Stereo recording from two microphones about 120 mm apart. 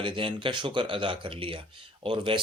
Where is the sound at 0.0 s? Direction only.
45° right (ahead or behind).